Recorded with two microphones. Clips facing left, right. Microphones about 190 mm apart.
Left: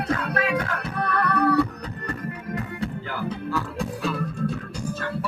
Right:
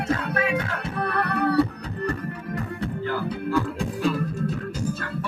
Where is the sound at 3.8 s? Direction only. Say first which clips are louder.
Right 3 dB; 30° right (ahead or behind).